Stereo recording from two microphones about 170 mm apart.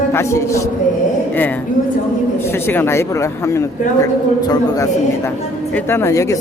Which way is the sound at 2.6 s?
15° left (ahead or behind).